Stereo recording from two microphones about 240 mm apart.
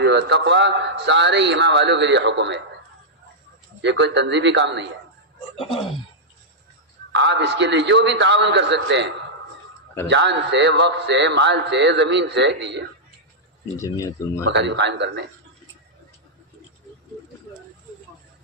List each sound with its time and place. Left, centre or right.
0.0 s a man's voice: right
3.8 s a man's voice: right
7.1 s a man's voice: right
13.7 s speech: centre
14.5 s a man's voice: right